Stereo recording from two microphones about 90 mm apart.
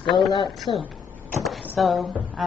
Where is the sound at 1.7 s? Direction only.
Centre (ahead or behind).